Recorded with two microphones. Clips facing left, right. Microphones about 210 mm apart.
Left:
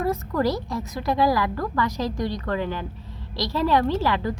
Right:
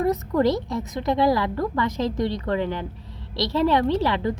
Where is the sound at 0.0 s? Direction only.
20° right (ahead or behind).